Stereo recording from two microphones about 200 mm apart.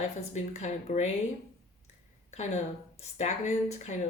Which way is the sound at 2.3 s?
35° left (ahead or behind).